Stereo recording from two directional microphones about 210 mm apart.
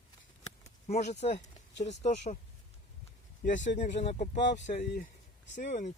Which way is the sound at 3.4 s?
35° left (ahead or behind).